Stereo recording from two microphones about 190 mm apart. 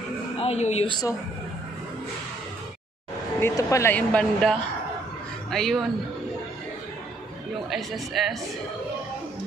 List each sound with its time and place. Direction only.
0.4 s speech: 35° left (ahead or behind)
3.3 s speech: 15° left (ahead or behind)
7.7 s speech: centre (ahead or behind)